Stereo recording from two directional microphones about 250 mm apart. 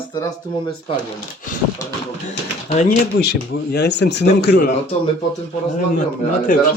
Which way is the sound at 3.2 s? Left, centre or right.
Left.